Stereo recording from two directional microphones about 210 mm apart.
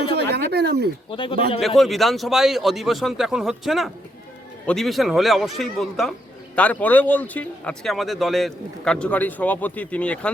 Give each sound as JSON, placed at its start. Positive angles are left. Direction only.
{"t": 0.2, "sound": "a sound", "side_deg": -50}
{"t": 1.1, "sound": "speech", "side_deg": 25}
{"t": 1.6, "sound": "speech", "side_deg": 0}